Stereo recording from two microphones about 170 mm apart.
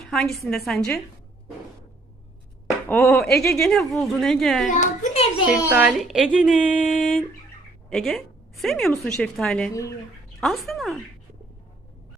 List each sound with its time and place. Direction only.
0.0 s a woman's voice: centre (ahead or behind)
2.9 s a woman's voice: centre (ahead or behind)
4.7 s a child's voice: 45° left (ahead or behind)
5.5 s a woman's voice: 10° right (ahead or behind)